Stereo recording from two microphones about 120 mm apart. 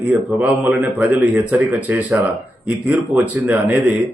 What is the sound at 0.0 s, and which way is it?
Speech, 10° right (ahead or behind).